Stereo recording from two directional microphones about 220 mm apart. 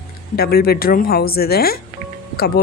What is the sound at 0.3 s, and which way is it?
A woman's voice, 45° left (ahead or behind).